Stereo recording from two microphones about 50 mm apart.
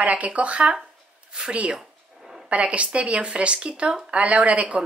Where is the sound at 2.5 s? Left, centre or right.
Right.